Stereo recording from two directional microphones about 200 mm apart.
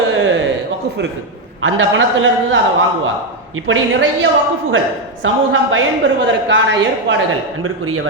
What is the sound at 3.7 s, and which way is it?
Speech, 70° right (ahead or behind).